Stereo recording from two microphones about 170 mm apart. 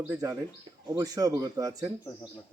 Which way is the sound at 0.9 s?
20° right (ahead or behind).